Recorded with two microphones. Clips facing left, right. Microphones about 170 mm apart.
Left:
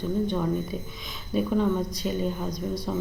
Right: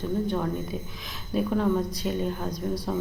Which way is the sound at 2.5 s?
30° right (ahead or behind).